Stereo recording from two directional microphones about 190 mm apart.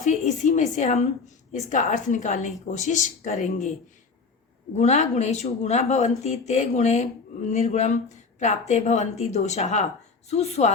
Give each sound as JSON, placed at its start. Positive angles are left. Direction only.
{"t": 0.0, "sound": "a woman's voice", "side_deg": 40}
{"t": 4.7, "sound": "speech", "side_deg": 35}